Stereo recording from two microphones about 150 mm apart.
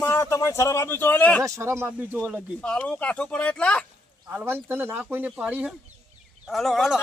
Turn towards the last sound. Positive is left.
turn(degrees=0)  # may be behind; listen again after turning